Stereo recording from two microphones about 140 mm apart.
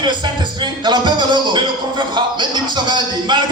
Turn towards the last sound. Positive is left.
turn(degrees=-30)  # may be behind; listen again after turning